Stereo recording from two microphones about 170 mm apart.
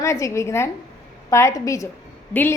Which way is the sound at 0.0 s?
15° left (ahead or behind).